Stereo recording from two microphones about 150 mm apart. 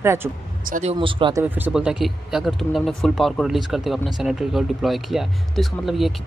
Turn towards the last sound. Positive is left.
turn(degrees=0)  # may be behind; listen again after turning